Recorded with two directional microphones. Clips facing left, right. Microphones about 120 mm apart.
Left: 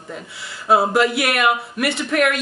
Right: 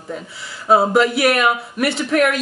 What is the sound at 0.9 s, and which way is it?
Speech, centre (ahead or behind).